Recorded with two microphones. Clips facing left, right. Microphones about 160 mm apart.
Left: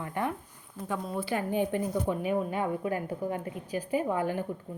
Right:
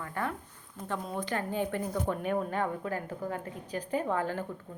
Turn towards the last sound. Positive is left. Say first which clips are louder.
# left 2 dB
turn(degrees=15)  # may be behind; listen again after turning